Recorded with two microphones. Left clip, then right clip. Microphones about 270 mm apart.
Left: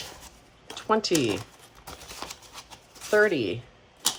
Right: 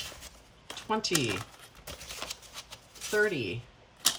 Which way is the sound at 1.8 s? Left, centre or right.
Centre.